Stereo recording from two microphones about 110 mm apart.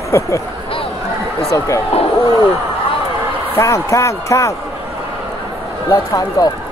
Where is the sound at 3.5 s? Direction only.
30° left (ahead or behind).